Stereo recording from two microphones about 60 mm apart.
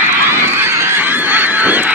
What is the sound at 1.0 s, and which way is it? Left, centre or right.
Goose, right.